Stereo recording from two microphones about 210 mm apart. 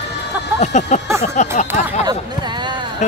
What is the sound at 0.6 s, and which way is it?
Speech, 35° left (ahead or behind).